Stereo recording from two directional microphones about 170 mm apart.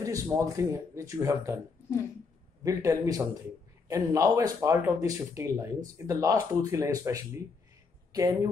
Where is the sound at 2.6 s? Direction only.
20° right (ahead or behind).